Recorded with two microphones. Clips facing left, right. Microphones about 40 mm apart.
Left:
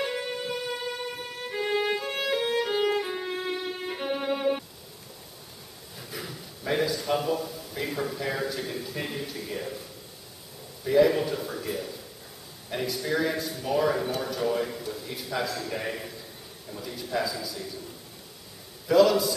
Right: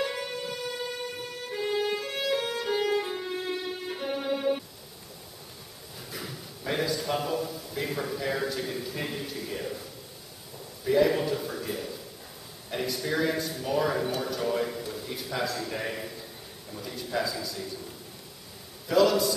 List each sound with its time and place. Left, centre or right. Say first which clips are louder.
0.0 s music: left 1 dB; centre
5.9 s a man's voice: left 1 dB; centre
10.9 s a man's voice: left 2 dB; centre
18.9 s speech: left 2 dB; centre